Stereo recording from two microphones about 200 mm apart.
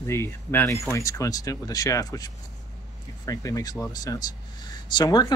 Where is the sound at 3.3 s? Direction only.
15° left (ahead or behind).